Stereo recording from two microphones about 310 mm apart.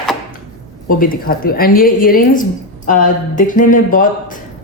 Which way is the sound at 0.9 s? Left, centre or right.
Left.